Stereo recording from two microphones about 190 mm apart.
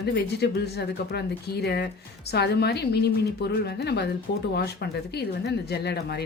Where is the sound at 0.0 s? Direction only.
60° left (ahead or behind).